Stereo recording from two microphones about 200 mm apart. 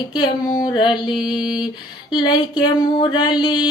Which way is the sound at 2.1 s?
25° left (ahead or behind).